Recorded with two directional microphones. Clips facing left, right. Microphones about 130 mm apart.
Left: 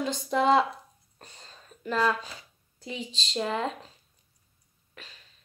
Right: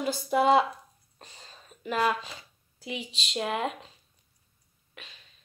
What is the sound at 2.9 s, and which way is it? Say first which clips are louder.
Speech: even; 30° left (ahead or behind).